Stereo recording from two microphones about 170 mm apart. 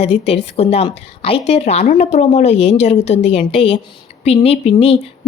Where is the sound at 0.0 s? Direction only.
35° left (ahead or behind).